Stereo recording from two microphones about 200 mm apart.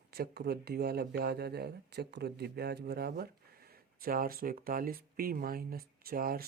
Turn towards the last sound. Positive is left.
turn(degrees=-45)  # may be behind; listen again after turning